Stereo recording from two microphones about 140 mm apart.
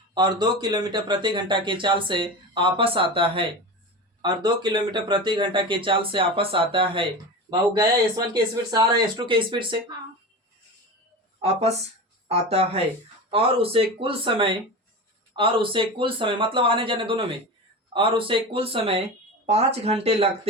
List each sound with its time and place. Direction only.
0.1 s speech: 30° right (ahead or behind)
11.3 s speech: 45° right (ahead or behind)